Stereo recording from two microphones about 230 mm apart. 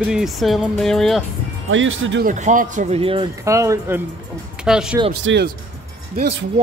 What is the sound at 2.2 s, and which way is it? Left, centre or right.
Speech, right.